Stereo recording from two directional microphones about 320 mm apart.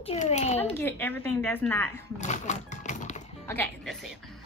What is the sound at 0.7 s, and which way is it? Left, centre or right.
A woman's voice, centre.